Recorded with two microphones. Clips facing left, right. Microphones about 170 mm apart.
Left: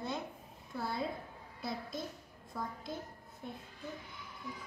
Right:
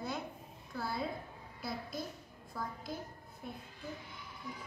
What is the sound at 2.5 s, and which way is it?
Speech, 20° left (ahead or behind).